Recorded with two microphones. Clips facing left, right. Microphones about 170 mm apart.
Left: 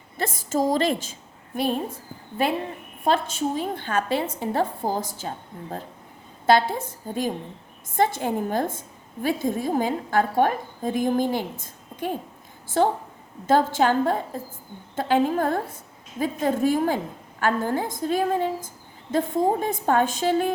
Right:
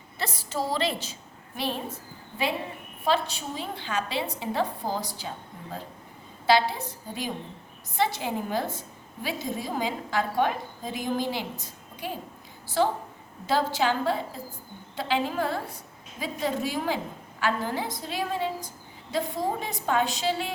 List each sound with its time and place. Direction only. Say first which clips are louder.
0.2 s a woman's voice: left 7 dB; 50° left (ahead or behind)
3.0 s a woman's voice: left 4 dB; 50° left (ahead or behind)
6.4 s a woman's voice: left 3 dB; 50° left (ahead or behind)